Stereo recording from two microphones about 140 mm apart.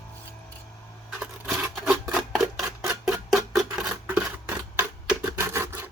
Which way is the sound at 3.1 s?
5° right (ahead or behind).